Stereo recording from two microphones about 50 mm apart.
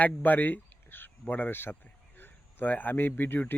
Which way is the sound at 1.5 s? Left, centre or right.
Left.